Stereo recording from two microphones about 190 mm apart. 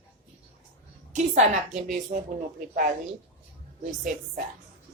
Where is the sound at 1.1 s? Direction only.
40° right (ahead or behind).